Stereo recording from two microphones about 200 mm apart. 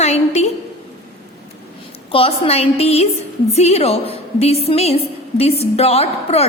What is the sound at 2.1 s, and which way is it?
A woman's voice, 30° left (ahead or behind).